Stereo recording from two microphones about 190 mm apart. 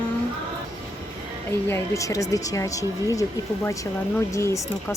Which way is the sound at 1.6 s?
15° left (ahead or behind).